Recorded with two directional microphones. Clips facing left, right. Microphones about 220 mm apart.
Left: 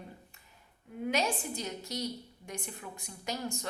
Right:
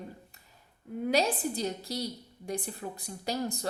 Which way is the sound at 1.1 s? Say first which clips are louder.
Right 4 dB; 35° right (ahead or behind).